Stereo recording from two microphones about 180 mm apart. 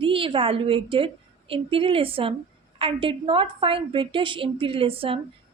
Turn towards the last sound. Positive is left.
turn(degrees=-30)  # may be behind; listen again after turning